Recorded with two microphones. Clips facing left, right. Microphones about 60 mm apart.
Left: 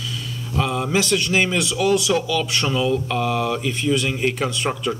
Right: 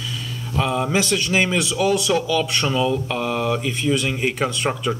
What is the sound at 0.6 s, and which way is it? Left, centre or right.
Speech, centre.